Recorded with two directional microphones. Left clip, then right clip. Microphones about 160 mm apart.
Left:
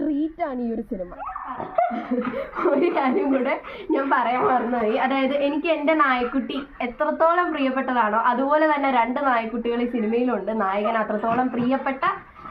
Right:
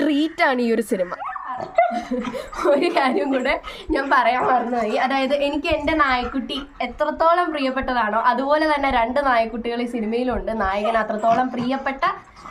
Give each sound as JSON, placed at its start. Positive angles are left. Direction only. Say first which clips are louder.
{"t": 0.0, "sound": "a woman's voice", "louder": "right 6 dB", "side_deg": -55}
{"t": 2.6, "sound": "a woman's voice", "louder": "right 3 dB", "side_deg": -30}